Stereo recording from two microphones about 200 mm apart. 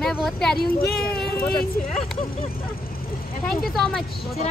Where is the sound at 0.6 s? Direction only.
50° left (ahead or behind).